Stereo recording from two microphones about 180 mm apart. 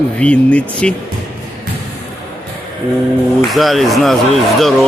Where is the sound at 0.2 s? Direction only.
5° left (ahead or behind).